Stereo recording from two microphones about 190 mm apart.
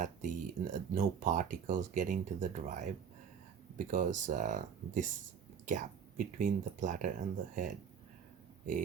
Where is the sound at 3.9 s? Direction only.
40° right (ahead or behind).